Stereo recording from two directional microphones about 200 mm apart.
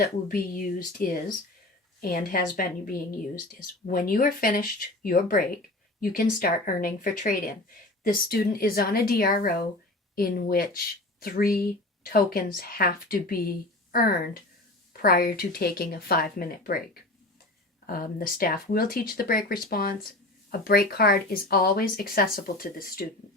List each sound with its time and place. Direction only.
0.0 s speech: 45° left (ahead or behind)